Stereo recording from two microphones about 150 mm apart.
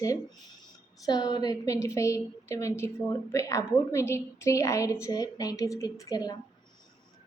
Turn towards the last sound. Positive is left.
turn(degrees=25)  # may be behind; listen again after turning